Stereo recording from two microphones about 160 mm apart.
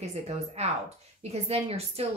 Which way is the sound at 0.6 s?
40° right (ahead or behind).